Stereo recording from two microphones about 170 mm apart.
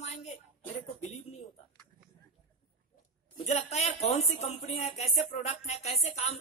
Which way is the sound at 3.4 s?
40° left (ahead or behind).